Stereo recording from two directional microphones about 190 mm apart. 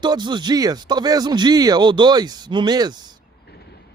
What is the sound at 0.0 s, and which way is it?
Speech, 25° right (ahead or behind).